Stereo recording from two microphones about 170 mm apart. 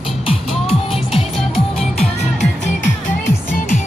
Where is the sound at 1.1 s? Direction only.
Centre (ahead or behind).